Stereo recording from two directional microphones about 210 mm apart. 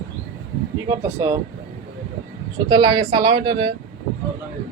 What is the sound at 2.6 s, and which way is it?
Speech, 20° right (ahead or behind).